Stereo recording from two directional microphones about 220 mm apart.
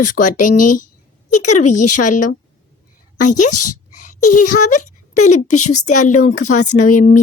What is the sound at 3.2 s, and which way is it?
Speech, 90° left.